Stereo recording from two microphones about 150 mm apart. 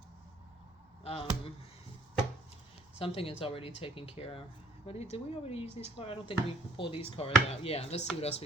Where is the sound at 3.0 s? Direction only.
40° left (ahead or behind).